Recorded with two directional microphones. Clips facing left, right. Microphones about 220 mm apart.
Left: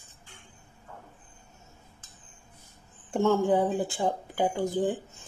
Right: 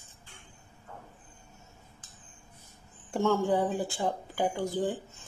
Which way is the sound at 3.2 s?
20° left (ahead or behind).